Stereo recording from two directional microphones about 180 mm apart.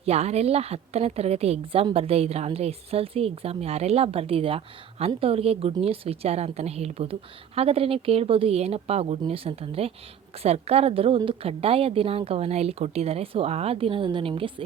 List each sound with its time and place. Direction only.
0.0 s a woman's voice: 35° right (ahead or behind)